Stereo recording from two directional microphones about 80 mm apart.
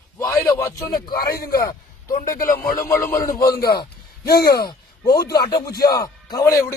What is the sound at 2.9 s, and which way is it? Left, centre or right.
Speech, left.